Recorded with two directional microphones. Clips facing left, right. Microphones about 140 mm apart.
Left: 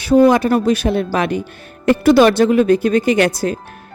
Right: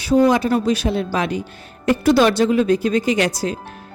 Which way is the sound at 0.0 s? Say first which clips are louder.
Left 4 dB; 55° left (ahead or behind).